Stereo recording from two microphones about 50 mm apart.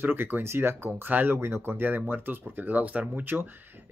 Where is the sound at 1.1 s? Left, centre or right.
Right.